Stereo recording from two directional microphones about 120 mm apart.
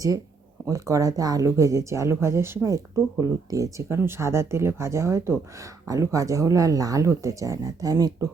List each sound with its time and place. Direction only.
0.7 s speech: 25° right (ahead or behind)